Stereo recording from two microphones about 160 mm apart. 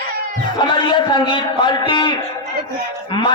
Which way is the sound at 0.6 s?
30° left (ahead or behind).